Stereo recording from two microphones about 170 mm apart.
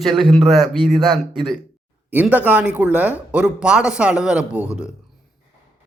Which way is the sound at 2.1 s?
10° right (ahead or behind).